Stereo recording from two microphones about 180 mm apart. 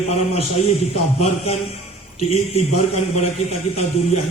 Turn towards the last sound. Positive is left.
turn(degrees=35)  # may be behind; listen again after turning